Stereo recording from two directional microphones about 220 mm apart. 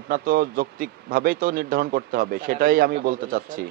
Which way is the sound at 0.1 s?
40° right (ahead or behind).